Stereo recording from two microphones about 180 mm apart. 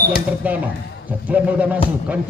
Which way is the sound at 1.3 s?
10° right (ahead or behind).